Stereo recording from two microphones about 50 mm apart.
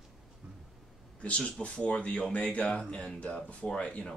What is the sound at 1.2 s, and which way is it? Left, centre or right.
Speech, left.